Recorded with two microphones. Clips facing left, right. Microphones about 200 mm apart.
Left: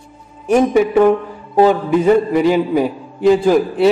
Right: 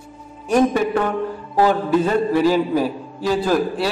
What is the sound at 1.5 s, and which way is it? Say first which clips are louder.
A man's voice: left 5 dB; 20° left (ahead or behind).